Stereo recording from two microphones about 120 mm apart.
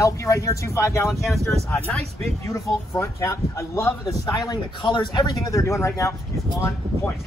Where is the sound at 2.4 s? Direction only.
25° left (ahead or behind).